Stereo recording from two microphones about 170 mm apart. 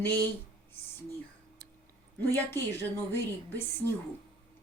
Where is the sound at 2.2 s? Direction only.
15° left (ahead or behind).